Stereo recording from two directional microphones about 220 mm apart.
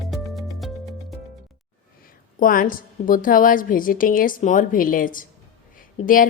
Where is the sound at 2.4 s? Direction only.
40° left (ahead or behind).